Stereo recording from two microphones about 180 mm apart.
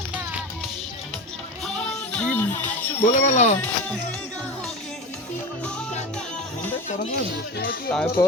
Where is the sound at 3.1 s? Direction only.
45° left (ahead or behind).